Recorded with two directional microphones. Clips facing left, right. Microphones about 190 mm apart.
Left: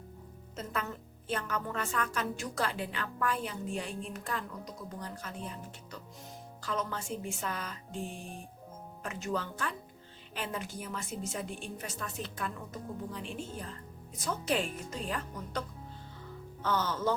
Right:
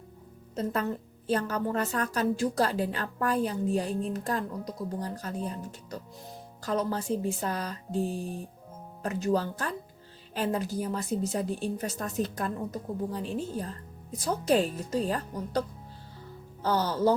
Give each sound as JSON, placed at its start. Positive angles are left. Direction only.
{"t": 0.5, "sound": "a woman's voice", "side_deg": -35}
{"t": 16.6, "sound": "a woman's voice", "side_deg": -35}